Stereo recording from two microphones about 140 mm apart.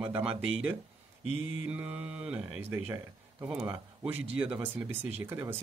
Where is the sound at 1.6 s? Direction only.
10° right (ahead or behind).